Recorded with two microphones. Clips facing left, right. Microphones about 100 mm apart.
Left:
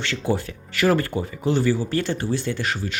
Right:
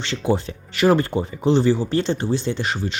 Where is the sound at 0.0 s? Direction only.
20° right (ahead or behind).